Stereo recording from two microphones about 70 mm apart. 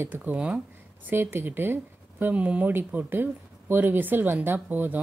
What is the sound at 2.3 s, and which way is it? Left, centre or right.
Speech, right.